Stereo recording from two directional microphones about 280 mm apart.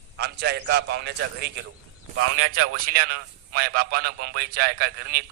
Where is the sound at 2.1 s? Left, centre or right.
Right.